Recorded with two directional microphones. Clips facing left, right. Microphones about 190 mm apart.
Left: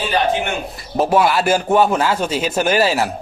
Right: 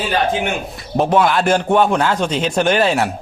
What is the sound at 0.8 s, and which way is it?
Speech, centre (ahead or behind).